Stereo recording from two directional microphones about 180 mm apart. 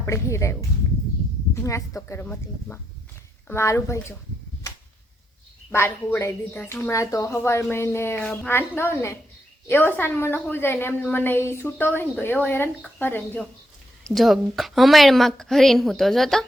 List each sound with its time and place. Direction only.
0.0 s a woman's voice: 15° left (ahead or behind)
1.5 s a woman's voice: 15° left (ahead or behind)
5.7 s a woman's voice: 15° left (ahead or behind)